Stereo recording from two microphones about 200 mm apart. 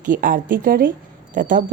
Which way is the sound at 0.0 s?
40° right (ahead or behind).